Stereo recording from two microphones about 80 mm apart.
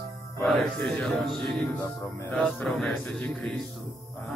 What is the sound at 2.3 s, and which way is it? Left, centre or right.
Speech, centre.